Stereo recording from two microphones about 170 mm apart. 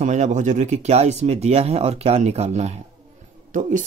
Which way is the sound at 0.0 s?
45° right (ahead or behind).